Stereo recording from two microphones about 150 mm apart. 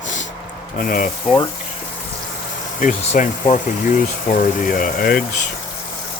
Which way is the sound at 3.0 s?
55° left (ahead or behind).